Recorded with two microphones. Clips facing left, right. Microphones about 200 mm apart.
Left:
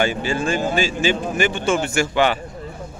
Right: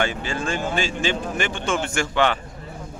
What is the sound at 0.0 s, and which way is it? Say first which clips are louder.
A man's voice: left 4 dB; 10° left (ahead or behind).